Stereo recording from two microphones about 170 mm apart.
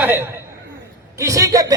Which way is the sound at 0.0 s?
10° right (ahead or behind).